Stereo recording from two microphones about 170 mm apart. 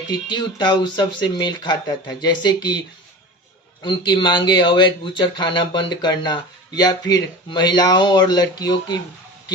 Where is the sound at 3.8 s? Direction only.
25° left (ahead or behind).